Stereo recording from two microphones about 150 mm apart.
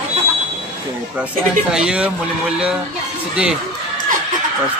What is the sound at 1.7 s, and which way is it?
Speech, 5° right (ahead or behind).